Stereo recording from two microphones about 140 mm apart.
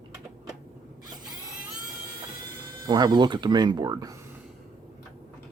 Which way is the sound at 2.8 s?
30° right (ahead or behind).